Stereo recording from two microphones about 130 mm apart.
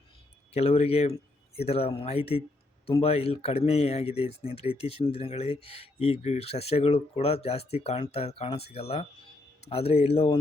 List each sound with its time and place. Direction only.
0.5 s speech: 50° left (ahead or behind)